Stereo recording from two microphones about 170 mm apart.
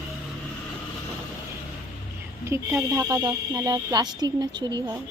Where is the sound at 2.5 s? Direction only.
15° right (ahead or behind).